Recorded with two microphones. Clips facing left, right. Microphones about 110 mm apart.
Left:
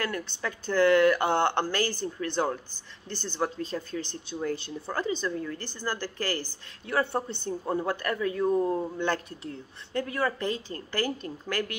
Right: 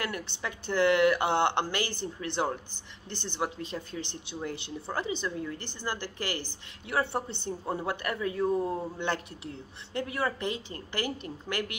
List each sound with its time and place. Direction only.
0.0 s speech: 20° right (ahead or behind)